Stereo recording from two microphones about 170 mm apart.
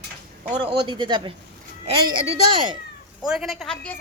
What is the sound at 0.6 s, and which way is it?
Speech, 30° right (ahead or behind).